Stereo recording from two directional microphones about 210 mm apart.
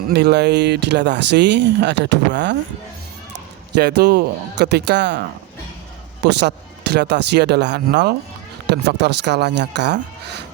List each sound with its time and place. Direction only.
0.1 s speech: 50° right (ahead or behind)
3.8 s speech: 50° right (ahead or behind)
6.2 s speech: 55° right (ahead or behind)